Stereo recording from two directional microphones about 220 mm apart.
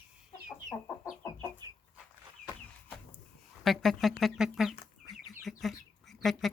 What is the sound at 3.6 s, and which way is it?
Chicken, centre (ahead or behind).